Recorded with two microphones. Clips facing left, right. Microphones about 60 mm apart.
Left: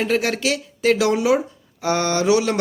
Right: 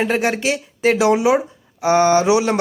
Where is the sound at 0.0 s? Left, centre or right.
Right.